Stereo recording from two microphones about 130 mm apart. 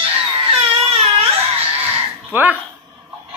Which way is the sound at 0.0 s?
50° right (ahead or behind).